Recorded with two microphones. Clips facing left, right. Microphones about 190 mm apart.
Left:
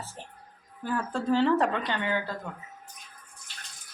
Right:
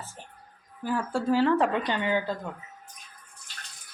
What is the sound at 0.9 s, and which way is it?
Speech, 10° right (ahead or behind).